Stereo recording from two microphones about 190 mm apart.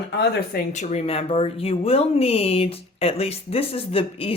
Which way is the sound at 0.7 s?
35° left (ahead or behind).